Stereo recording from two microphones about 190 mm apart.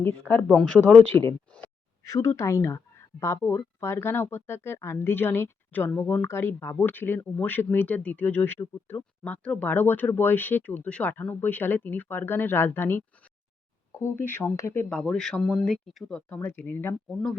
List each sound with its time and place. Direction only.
0.3 s speech: 5° left (ahead or behind)